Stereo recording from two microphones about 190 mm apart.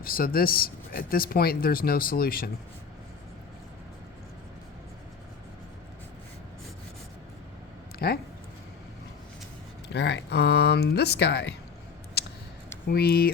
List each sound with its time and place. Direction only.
0.0 s speech: 50° left (ahead or behind)
7.9 s speech: 55° left (ahead or behind)
9.9 s speech: 65° left (ahead or behind)
12.9 s speech: 55° left (ahead or behind)